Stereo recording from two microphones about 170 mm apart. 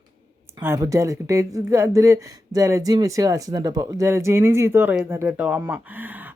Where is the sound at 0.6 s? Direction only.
15° right (ahead or behind).